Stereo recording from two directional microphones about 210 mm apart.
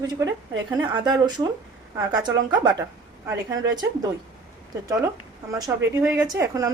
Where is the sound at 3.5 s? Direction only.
65° right (ahead or behind).